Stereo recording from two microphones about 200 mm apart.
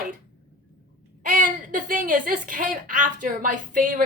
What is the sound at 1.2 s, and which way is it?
A woman's voice, 40° right (ahead or behind).